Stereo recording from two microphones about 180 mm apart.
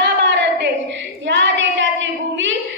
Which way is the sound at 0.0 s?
80° right.